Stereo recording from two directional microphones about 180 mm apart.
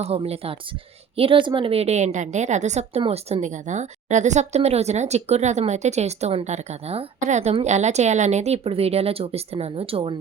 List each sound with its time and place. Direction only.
0.0 s a woman's voice: 35° right (ahead or behind)